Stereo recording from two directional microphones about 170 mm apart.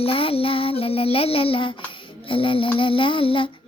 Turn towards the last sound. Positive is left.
turn(degrees=30)  # may be behind; listen again after turning